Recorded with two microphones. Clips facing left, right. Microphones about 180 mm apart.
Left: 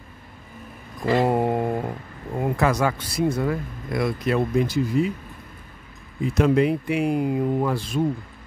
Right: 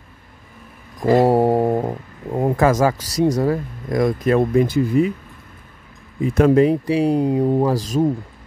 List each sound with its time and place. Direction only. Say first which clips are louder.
1.0 s a sound: right 6 dB; 40° right (ahead or behind)
2.3 s speech: right 5 dB; 40° right (ahead or behind); by 5.1 s 60° right (ahead or behind)
6.2 s speech: right 5 dB; 55° right (ahead or behind)
6.5 s speech: right 5 dB; 40° right (ahead or behind)